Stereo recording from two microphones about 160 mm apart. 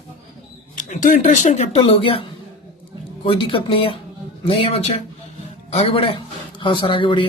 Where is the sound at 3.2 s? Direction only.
35° left (ahead or behind).